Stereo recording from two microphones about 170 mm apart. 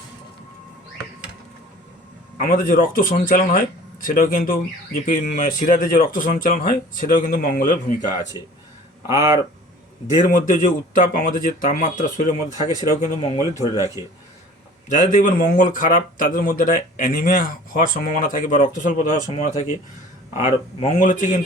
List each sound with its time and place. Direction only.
2.4 s a man's voice: 50° left (ahead or behind)
8.4 s speech: 20° right (ahead or behind)
10.2 s a man's voice: 50° left (ahead or behind)
13.7 s a man's voice: 15° right (ahead or behind)
14.9 s a man's voice: 50° left (ahead or behind)